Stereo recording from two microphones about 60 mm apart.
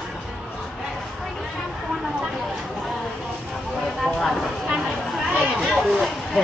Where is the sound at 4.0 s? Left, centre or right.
Centre.